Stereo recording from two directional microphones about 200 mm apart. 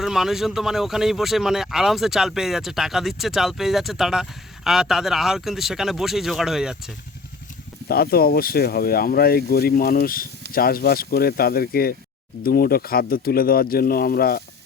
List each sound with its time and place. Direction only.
0.0 s speech: centre (ahead or behind)
7.9 s speech: 50° left (ahead or behind)